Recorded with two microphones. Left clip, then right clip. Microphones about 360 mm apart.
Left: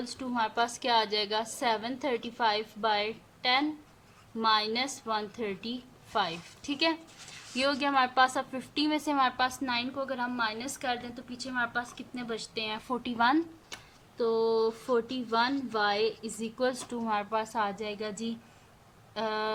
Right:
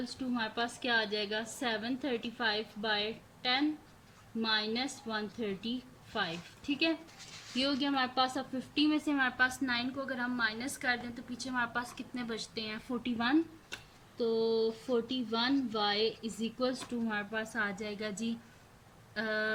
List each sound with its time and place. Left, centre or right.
0.1 s a woman's voice: centre
14.4 s speech: centre
14.8 s speech: left
15.3 s a woman's voice: centre